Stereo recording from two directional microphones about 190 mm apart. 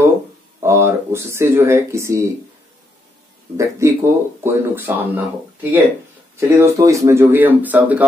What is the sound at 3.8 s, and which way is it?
Speech, 15° right (ahead or behind).